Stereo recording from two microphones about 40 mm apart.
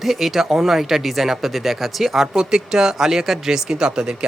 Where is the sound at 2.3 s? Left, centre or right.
Centre.